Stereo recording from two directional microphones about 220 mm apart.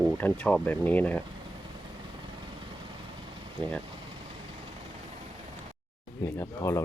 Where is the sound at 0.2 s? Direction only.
5° left (ahead or behind).